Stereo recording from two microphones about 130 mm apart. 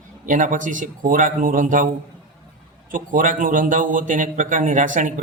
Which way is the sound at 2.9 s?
90° right.